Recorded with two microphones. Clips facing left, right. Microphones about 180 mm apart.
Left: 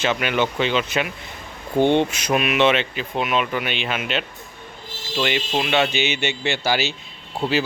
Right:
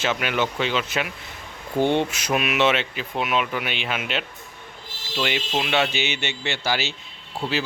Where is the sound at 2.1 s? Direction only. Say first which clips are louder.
Left 3 dB; 5° right (ahead or behind).